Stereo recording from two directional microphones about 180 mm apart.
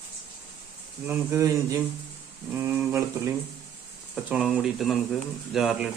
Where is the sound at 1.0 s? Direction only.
15° right (ahead or behind).